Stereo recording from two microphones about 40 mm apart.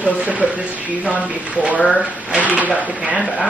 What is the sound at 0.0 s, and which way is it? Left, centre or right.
Speech, right.